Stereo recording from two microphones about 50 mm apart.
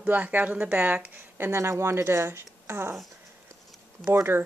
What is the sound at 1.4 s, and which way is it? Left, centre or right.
Speech, right.